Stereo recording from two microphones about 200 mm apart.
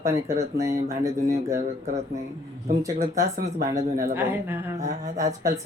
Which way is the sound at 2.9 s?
45° right (ahead or behind).